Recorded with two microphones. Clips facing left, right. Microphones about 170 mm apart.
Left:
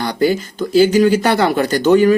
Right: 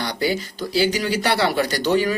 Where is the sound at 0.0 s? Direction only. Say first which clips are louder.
Left 7 dB; 50° left (ahead or behind).